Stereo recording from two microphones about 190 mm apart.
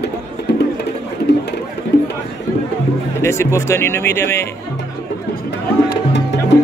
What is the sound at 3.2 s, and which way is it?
Speech, 15° left (ahead or behind).